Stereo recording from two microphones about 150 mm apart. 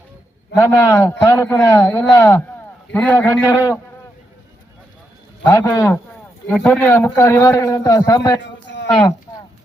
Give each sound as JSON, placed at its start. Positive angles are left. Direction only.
{"t": 0.5, "sound": "a man's voice", "side_deg": 20}
{"t": 3.4, "sound": "a man's voice", "side_deg": 20}
{"t": 5.4, "sound": "a man's voice", "side_deg": 20}